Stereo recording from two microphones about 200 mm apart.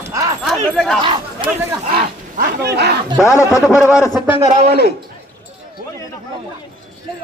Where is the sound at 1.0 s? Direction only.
25° right (ahead or behind).